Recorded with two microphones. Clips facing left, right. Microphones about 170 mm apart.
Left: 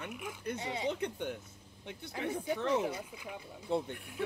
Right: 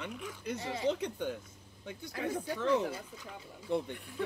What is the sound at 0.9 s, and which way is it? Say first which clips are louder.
Speech: right 5 dB; 20° left (ahead or behind).